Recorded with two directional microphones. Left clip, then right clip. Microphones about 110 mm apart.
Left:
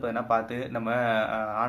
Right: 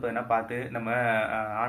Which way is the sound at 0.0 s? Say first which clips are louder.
Left 1 dB; 25° left (ahead or behind).